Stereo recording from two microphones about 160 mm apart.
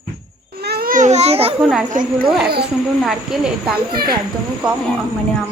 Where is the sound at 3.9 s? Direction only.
70° right (ahead or behind).